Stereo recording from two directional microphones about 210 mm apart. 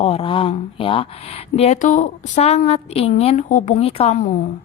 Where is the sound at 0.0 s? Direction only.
25° left (ahead or behind).